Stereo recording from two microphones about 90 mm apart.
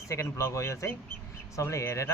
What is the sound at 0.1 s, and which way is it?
A man's voice, 35° left (ahead or behind).